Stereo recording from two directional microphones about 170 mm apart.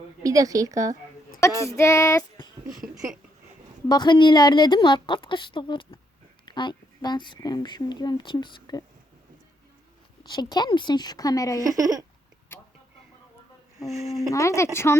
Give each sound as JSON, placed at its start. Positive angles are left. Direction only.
{"t": 0.2, "sound": "a woman's voice", "side_deg": -20}
{"t": 1.4, "sound": "speech", "side_deg": 15}
{"t": 3.8, "sound": "speech", "side_deg": 25}
{"t": 10.2, "sound": "speech", "side_deg": 25}
{"t": 11.6, "sound": "speech", "side_deg": -20}
{"t": 12.5, "sound": "vehicle", "side_deg": 15}
{"t": 14.3, "sound": "a woman's voice", "side_deg": 15}